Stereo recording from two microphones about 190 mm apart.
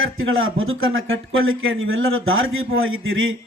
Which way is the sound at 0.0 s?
90° right.